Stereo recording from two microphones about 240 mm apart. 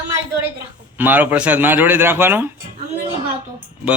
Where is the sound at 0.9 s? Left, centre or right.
Centre.